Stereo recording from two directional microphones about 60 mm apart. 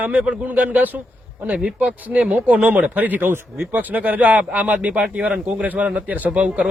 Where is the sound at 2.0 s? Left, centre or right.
Right.